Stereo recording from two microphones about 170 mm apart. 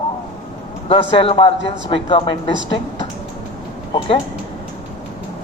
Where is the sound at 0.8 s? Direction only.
35° left (ahead or behind).